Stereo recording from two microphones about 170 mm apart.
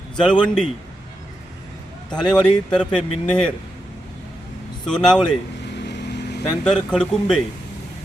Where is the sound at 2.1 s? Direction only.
5° left (ahead or behind).